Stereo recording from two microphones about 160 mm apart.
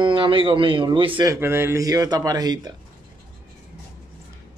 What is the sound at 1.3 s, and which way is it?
Speech, 15° right (ahead or behind).